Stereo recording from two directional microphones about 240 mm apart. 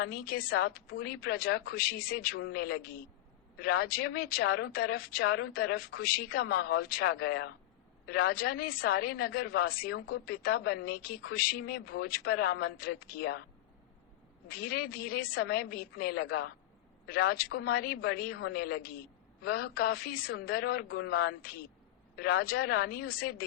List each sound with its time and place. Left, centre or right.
0.0 s speech: left
14.4 s speech: left